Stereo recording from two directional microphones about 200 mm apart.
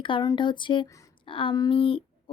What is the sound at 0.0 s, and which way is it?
A woman's voice, 20° left (ahead or behind).